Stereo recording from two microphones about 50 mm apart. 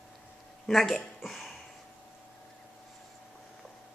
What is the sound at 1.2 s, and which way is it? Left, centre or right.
Cough, centre.